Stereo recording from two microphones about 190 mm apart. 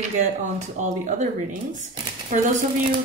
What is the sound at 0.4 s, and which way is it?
Speech, 40° right (ahead or behind).